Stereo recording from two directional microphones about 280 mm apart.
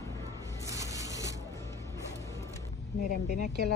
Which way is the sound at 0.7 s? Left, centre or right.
Centre.